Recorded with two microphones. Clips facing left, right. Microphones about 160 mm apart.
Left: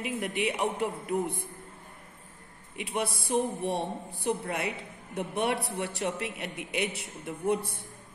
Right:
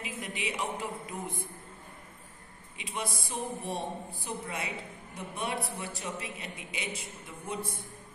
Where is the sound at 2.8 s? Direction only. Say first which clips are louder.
Left 5 dB; 65° left (ahead or behind).